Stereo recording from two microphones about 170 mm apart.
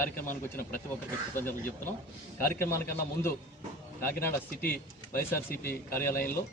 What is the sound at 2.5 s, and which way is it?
Speech, 15° left (ahead or behind).